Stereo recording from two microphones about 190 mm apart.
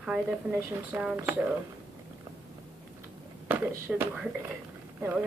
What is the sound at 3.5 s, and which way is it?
Speech, 10° right (ahead or behind).